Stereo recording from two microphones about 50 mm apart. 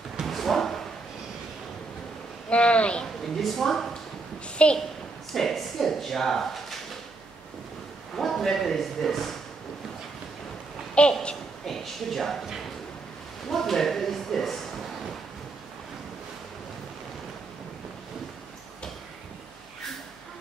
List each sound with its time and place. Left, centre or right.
0.2 s a sound: centre
2.5 s speech: left
3.3 s speech: centre
4.6 s a woman's voice: left
5.3 s speech: centre
8.2 s a man's voice: centre
11.0 s a woman's voice: left
11.6 s a sound: centre
13.5 s speech: centre